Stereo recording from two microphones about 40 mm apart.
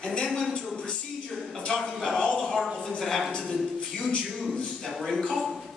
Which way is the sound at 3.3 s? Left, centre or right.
Centre.